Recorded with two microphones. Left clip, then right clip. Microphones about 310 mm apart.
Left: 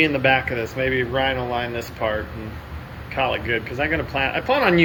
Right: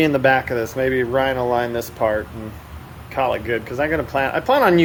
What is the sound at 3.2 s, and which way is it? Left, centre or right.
Speech, centre.